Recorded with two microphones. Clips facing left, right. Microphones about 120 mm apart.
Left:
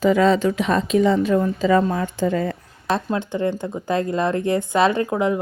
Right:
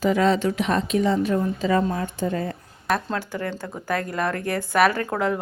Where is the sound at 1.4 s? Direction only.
90° left.